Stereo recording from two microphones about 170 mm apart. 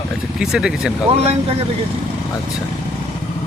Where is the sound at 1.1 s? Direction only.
40° right (ahead or behind).